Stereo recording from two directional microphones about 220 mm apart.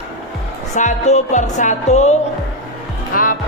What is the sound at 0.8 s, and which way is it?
Music, 30° left (ahead or behind).